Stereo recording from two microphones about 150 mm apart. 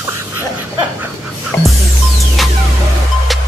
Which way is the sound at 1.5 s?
15° left (ahead or behind).